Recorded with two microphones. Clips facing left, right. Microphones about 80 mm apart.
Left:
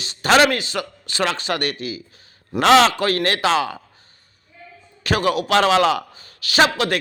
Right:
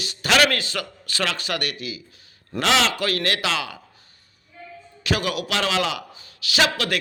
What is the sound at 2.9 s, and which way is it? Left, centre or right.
Speech, left.